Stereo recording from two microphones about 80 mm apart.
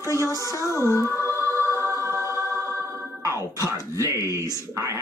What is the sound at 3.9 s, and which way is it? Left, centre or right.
Speech, right.